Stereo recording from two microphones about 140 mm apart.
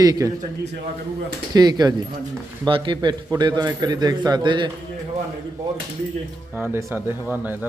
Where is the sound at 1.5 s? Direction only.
30° right (ahead or behind).